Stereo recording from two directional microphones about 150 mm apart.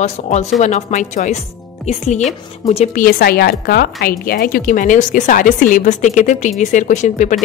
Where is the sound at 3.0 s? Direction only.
80° left.